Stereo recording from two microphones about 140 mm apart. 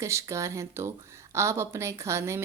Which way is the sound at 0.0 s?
20° right (ahead or behind).